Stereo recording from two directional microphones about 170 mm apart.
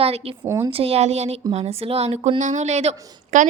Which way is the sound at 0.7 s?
35° right (ahead or behind).